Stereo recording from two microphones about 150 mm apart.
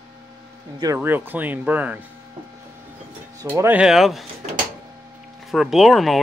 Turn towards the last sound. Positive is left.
turn(degrees=0)  # may be behind; listen again after turning